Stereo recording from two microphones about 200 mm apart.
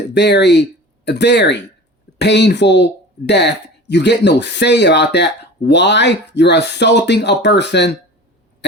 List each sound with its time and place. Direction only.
0.1 s speech: 60° left (ahead or behind)